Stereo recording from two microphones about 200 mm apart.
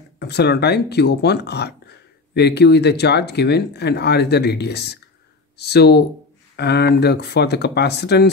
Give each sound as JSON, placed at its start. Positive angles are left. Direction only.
{"t": 0.2, "sound": "speech", "side_deg": 55}